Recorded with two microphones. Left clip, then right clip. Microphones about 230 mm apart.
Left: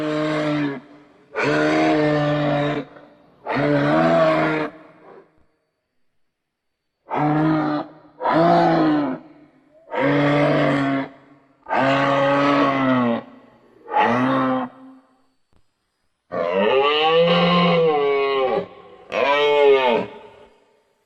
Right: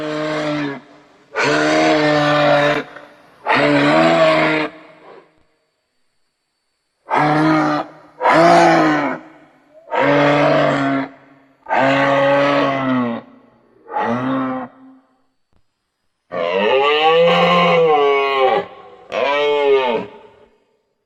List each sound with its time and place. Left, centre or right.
0.0 s a sound: centre; by 5.3 s right
7.0 s roar: right
9.0 s roar: right; by 15.0 s centre
16.3 s wild animals: centre